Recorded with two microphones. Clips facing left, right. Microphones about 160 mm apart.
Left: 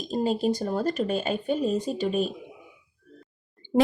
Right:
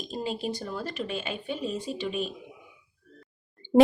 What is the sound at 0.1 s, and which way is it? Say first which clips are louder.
Speech: left 8 dB; 40° left (ahead or behind).